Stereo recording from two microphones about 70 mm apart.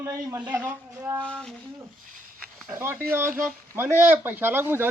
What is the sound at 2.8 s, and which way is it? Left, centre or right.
Speech, right.